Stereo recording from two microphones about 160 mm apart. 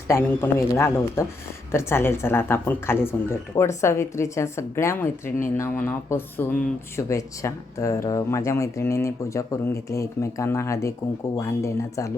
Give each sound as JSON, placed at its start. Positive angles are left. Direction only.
{"t": 0.1, "sound": "speech", "side_deg": 20}